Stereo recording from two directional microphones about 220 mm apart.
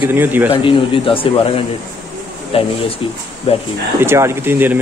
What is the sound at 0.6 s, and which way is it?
Speech, 25° left (ahead or behind).